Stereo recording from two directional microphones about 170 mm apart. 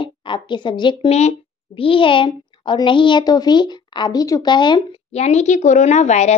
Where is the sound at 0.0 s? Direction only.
30° left (ahead or behind).